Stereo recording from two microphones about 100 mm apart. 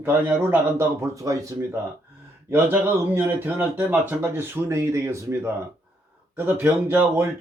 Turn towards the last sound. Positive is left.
turn(degrees=-25)  # may be behind; listen again after turning